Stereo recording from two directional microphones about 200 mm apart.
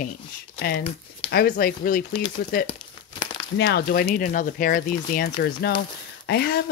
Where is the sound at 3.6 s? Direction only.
50° left (ahead or behind).